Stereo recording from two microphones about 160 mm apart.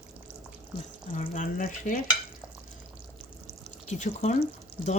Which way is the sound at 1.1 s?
55° left (ahead or behind).